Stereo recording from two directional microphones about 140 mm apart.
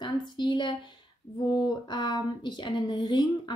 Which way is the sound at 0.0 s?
30° left (ahead or behind).